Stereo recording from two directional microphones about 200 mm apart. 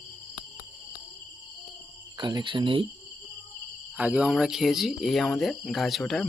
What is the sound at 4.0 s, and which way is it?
Speech, 5° right (ahead or behind).